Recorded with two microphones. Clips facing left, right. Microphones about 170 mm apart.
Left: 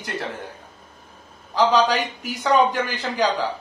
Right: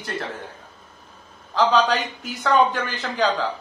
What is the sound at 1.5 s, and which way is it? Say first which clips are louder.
Speech: left 1 dB; 10° left (ahead or behind).